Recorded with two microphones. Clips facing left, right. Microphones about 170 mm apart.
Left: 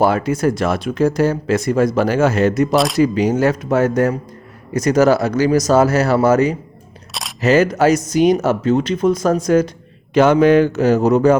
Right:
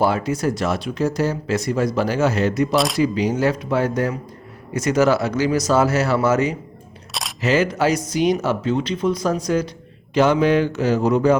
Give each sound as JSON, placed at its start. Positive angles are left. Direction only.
{"t": 0.0, "sound": "speech", "side_deg": 50}
{"t": 2.7, "sound": "speech", "side_deg": 0}
{"t": 3.0, "sound": "speech", "side_deg": 50}
{"t": 7.1, "sound": "single-lens reflex camera", "side_deg": 0}
{"t": 7.4, "sound": "speech", "side_deg": 40}